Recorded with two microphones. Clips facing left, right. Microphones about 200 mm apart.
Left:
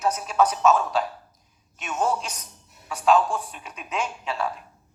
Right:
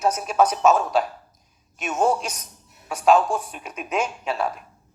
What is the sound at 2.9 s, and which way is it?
A woman's voice, 40° right (ahead or behind).